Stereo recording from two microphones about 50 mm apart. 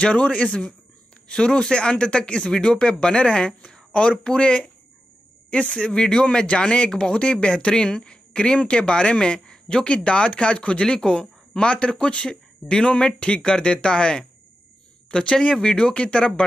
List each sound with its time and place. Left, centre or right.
0.0 s speech: left